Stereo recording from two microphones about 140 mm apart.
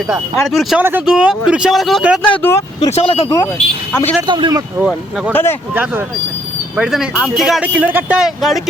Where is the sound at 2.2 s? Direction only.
10° left (ahead or behind).